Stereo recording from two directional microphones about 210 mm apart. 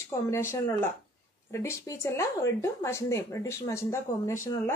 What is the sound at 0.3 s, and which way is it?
Speech, 10° left (ahead or behind).